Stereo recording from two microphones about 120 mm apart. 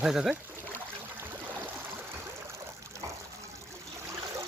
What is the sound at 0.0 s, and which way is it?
Speech, 5° right (ahead or behind).